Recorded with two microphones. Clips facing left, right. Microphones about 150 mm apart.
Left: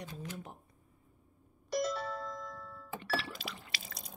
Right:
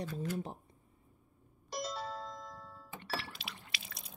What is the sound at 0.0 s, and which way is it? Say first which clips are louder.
Speech: right 6 dB; 35° right (ahead or behind).